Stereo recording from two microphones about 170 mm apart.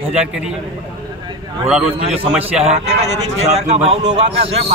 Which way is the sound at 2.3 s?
5° right (ahead or behind).